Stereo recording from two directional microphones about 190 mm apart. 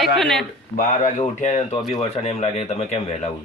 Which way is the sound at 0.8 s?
45° left (ahead or behind).